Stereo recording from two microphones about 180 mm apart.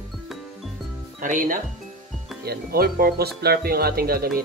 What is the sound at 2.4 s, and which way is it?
Speech, 55° right (ahead or behind).